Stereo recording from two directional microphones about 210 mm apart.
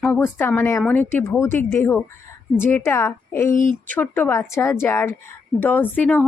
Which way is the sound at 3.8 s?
5° left (ahead or behind).